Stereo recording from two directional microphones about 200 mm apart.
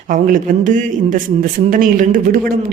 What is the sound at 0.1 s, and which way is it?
A man's voice, 40° right (ahead or behind).